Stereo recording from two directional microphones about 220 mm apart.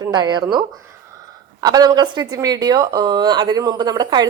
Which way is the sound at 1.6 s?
15° right (ahead or behind).